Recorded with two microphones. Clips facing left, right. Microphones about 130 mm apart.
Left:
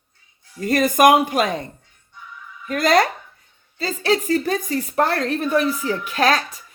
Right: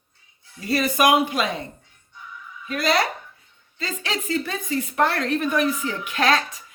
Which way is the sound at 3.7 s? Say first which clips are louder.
Left 9 dB; 35° left (ahead or behind).